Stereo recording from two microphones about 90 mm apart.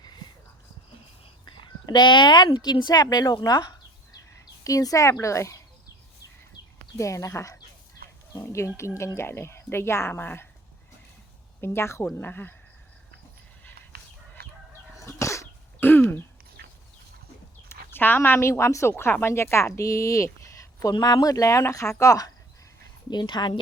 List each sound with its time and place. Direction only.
1.5 s speech: 60° left (ahead or behind); by 5.6 s 35° left (ahead or behind)
6.9 s a woman's voice: 35° left (ahead or behind)
11.6 s a woman's voice: 25° left (ahead or behind)
14.9 s cough: 35° left (ahead or behind)
17.7 s a woman's voice: 25° left (ahead or behind); by 20.9 s 40° left (ahead or behind)
20.9 s speech: 50° left (ahead or behind)
23.0 s a woman's voice: 55° left (ahead or behind)